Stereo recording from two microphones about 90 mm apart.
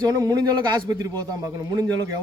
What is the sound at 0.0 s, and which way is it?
A man's voice, 45° right (ahead or behind).